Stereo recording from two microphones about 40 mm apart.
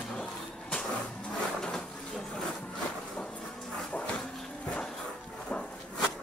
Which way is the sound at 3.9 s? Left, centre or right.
Left.